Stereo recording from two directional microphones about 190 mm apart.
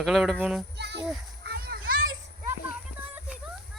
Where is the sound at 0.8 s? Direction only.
60° right (ahead or behind).